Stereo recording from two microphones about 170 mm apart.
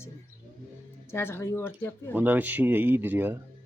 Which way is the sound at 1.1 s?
15° left (ahead or behind).